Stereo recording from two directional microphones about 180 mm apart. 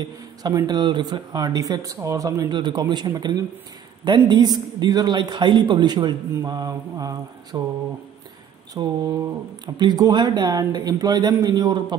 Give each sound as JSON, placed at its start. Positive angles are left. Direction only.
{"t": 0.0, "sound": "speech", "side_deg": -20}
{"t": 8.7, "sound": "speech", "side_deg": -20}